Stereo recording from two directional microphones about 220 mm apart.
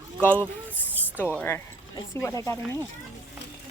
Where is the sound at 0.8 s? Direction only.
5° right (ahead or behind).